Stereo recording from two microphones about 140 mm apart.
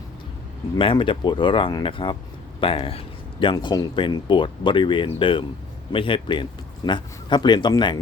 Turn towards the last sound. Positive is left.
turn(degrees=30)  # may be behind; listen again after turning